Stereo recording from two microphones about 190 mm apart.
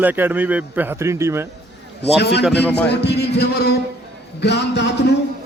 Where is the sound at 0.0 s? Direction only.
10° right (ahead or behind).